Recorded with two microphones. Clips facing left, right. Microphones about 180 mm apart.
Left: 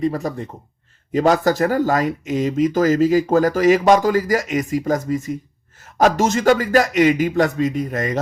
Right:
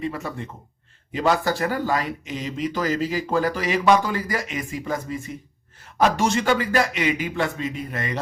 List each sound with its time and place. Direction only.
0.0 s speech: 40° left (ahead or behind)